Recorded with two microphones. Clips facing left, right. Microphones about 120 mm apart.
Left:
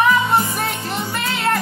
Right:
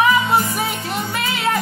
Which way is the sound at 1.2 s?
5° right (ahead or behind).